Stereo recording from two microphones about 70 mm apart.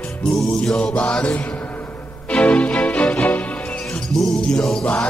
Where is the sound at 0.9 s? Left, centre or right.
Centre.